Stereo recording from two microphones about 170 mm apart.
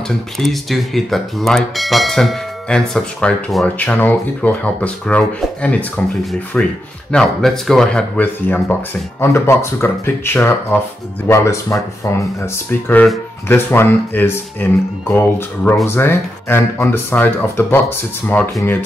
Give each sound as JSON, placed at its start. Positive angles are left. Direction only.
{"t": 0.4, "sound": "speech", "side_deg": 0}